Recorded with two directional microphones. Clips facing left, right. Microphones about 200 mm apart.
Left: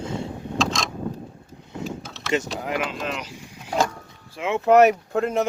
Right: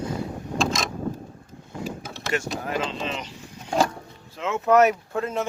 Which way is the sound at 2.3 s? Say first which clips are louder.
Left 3 dB; 20° left (ahead or behind).